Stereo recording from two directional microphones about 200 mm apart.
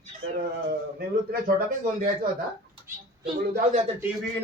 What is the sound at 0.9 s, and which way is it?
A man's voice, 50° right (ahead or behind).